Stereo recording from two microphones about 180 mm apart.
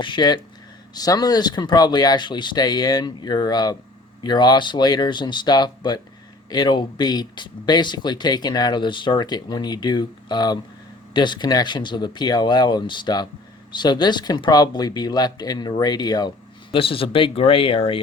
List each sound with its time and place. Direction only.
0.0 s speech: 25° left (ahead or behind)